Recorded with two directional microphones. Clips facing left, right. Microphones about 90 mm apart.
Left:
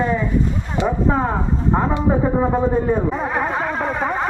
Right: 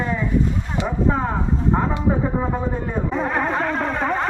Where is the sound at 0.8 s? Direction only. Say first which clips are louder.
Left 3 dB; 35° left (ahead or behind).